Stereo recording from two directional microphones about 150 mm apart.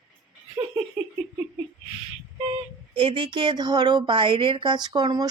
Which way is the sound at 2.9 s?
35° right (ahead or behind).